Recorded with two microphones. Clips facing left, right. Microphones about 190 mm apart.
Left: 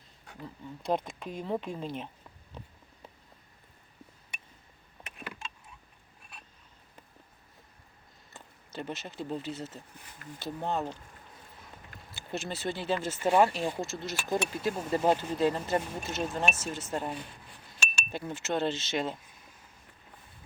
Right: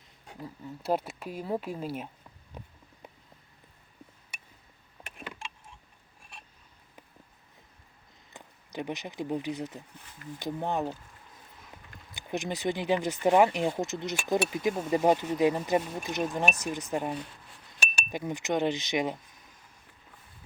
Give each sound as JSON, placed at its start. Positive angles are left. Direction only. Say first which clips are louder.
{"t": 0.3, "sound": "speech", "louder": "right 2 dB", "side_deg": -5}
{"t": 5.0, "sound": "power windows", "louder": "right 1 dB", "side_deg": -5}
{"t": 8.3, "sound": "speech", "louder": "right 2 dB", "side_deg": -15}
{"t": 12.1, "sound": "speech", "louder": "right 3 dB", "side_deg": -15}